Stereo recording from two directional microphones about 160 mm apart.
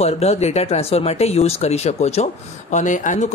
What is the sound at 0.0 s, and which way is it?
Speech, 40° left (ahead or behind).